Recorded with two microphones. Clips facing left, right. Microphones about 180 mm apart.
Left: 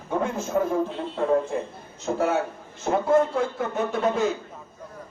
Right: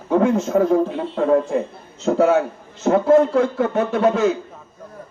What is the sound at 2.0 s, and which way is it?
A man's voice, 75° right (ahead or behind).